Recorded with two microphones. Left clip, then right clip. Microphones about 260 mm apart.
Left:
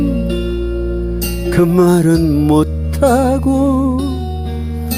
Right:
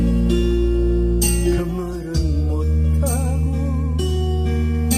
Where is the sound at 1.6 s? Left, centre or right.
Left.